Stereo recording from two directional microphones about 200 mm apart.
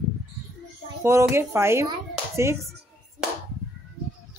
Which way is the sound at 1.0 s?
15° right (ahead or behind).